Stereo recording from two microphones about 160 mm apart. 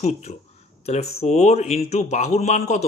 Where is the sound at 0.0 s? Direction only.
45° left (ahead or behind).